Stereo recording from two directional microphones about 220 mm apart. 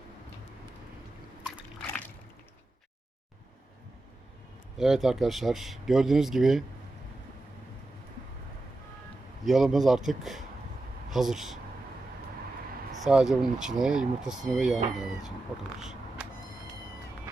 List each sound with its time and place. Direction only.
4.8 s speech: centre (ahead or behind)
9.4 s speech: centre (ahead or behind)
13.0 s speech: 5° right (ahead or behind)
15.8 s vehicle: 5° right (ahead or behind)